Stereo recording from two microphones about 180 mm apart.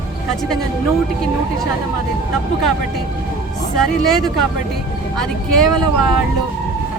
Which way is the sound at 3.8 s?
Centre (ahead or behind).